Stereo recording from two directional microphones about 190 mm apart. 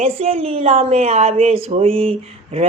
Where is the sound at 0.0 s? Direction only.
35° right (ahead or behind).